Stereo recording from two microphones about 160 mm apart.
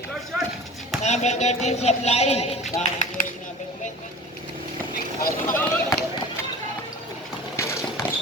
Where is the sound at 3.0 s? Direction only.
55° left (ahead or behind).